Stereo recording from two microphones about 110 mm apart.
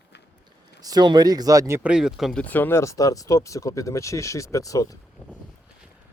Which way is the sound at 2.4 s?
15° left (ahead or behind).